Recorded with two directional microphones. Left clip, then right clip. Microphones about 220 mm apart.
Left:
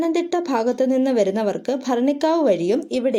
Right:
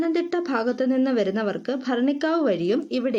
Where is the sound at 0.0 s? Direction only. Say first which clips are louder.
Left 3 dB; 15° left (ahead or behind).